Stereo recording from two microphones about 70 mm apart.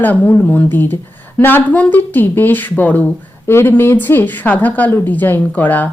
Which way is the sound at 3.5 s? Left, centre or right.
Left.